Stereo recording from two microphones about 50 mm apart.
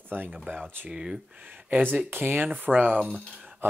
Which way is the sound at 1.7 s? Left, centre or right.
Right.